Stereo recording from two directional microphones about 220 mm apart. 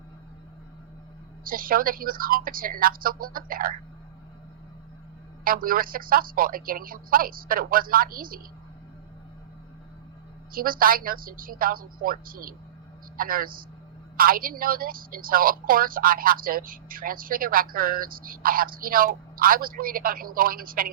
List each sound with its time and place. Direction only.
1.5 s a woman's voice: 40° right (ahead or behind)
5.5 s a woman's voice: 40° right (ahead or behind)
10.5 s a woman's voice: 40° right (ahead or behind)